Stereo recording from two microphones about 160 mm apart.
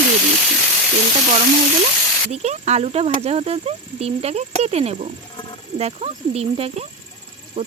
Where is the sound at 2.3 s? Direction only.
45° right (ahead or behind).